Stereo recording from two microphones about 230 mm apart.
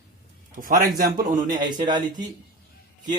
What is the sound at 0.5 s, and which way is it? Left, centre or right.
Speech, right.